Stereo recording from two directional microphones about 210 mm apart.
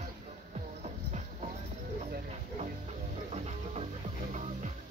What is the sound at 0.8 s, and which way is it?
Music, 35° right (ahead or behind).